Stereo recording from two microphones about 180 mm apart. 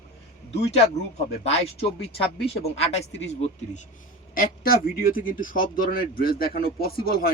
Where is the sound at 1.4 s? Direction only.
35° left (ahead or behind).